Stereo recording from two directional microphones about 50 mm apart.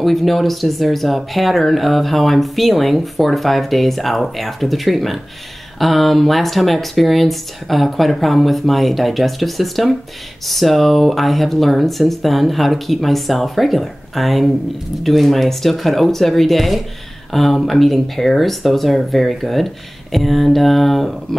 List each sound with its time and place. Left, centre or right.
0.0 s speech: centre